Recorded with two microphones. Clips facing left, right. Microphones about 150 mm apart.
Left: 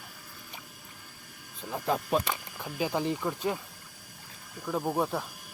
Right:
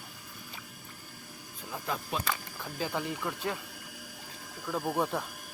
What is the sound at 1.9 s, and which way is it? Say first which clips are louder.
Speech: left 7 dB; 35° left (ahead or behind).